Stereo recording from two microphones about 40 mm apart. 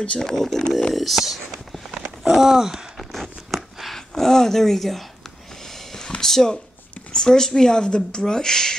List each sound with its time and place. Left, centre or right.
0.2 s speech: centre
0.9 s speech: centre
2.2 s a sound: centre
4.1 s speech: centre
5.9 s a sound: centre
7.1 s speech: centre